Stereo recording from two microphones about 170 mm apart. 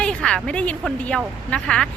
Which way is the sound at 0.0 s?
5° left (ahead or behind).